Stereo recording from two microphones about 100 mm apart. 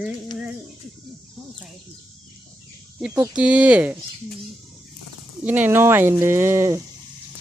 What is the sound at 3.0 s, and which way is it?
Speech, 10° right (ahead or behind).